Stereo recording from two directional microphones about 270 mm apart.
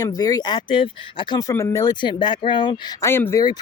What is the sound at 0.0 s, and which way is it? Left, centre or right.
Speech, centre.